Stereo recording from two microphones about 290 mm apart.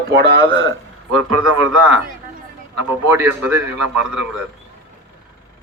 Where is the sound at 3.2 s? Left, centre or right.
Centre.